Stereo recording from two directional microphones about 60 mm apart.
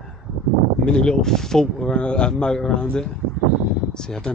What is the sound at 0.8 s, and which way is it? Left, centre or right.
Speech, centre.